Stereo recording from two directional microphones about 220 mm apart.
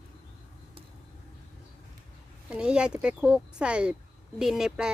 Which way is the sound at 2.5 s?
5° right (ahead or behind).